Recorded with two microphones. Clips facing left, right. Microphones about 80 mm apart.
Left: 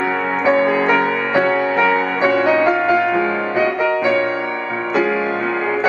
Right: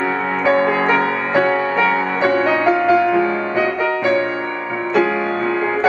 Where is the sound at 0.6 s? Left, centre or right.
Right.